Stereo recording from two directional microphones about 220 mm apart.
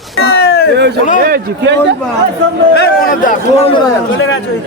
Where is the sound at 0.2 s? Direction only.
45° left (ahead or behind).